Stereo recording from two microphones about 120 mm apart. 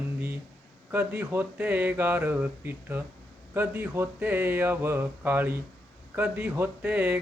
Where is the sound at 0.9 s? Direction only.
15° right (ahead or behind).